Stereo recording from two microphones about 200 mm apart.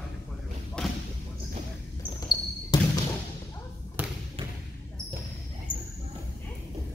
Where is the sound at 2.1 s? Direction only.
20° left (ahead or behind).